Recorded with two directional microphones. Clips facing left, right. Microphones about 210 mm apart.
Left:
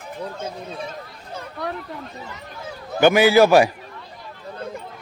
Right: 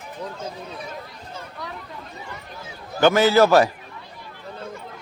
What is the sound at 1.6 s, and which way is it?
Speech, 60° left (ahead or behind).